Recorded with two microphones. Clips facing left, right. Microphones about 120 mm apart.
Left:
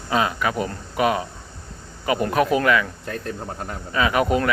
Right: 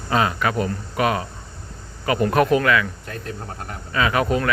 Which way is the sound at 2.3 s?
Centre (ahead or behind).